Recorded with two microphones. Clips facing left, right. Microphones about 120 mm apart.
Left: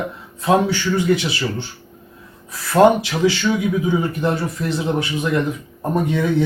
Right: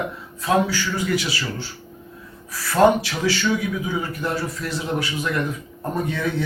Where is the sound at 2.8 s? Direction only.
20° left (ahead or behind).